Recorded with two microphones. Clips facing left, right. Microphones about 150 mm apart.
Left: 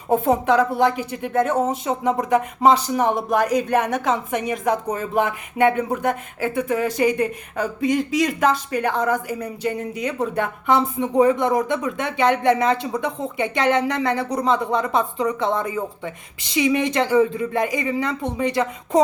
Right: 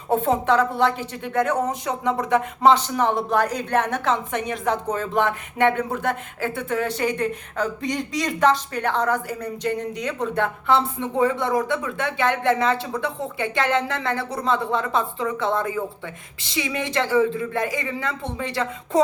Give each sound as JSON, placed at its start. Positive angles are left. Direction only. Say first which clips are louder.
{"t": 0.1, "sound": "speech", "louder": "left 2 dB", "side_deg": 15}